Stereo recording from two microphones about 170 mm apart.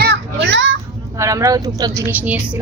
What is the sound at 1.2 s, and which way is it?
Speech, 20° right (ahead or behind).